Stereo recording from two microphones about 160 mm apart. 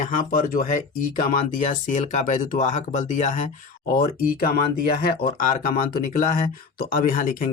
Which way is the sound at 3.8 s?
65° left (ahead or behind).